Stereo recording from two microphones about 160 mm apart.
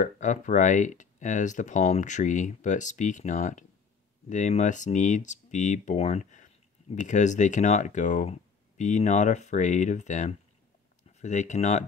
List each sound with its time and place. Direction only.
0.0 s speech: 50° left (ahead or behind)